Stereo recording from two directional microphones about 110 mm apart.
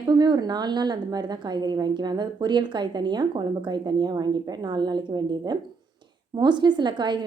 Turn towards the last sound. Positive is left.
turn(degrees=-45)  # may be behind; listen again after turning